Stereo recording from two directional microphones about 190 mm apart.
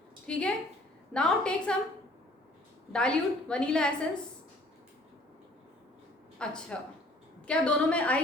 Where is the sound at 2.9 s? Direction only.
5° left (ahead or behind).